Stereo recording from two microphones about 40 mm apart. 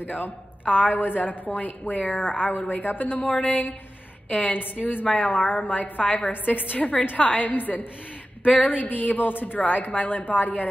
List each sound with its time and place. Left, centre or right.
0.0 s a woman's voice: left